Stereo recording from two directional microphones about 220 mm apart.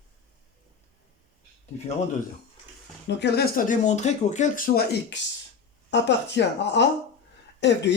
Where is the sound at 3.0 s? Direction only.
50° left (ahead or behind).